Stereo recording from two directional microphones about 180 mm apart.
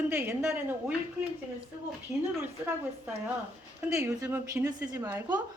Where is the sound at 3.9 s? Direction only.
15° right (ahead or behind).